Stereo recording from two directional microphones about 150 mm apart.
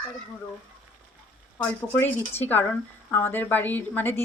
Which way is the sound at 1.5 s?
10° left (ahead or behind).